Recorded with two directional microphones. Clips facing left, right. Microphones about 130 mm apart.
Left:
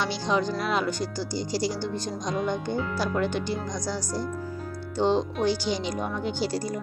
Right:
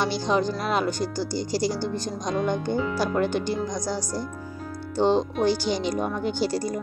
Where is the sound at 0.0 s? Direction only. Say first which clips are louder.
Right 3 dB; 45° right (ahead or behind).